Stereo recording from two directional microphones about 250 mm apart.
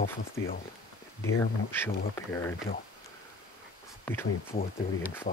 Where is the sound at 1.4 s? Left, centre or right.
Centre.